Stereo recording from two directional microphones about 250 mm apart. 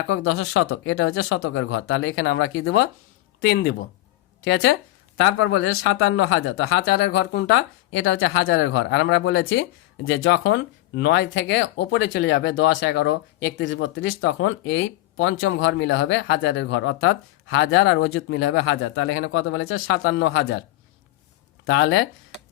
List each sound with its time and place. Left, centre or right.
0.1 s speech: left
6.8 s speech: left
21.7 s speech: left